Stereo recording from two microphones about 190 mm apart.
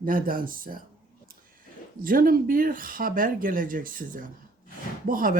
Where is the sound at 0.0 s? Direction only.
50° right (ahead or behind).